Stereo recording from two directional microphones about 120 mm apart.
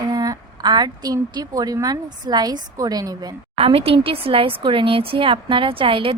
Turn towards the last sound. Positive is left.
turn(degrees=-45)  # may be behind; listen again after turning